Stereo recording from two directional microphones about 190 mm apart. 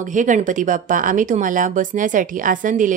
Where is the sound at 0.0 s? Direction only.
40° right (ahead or behind).